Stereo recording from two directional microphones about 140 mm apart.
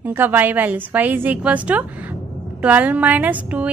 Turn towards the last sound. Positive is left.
turn(degrees=-10)  # may be behind; listen again after turning